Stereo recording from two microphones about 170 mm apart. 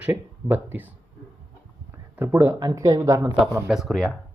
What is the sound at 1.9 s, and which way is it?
Speech, 15° right (ahead or behind).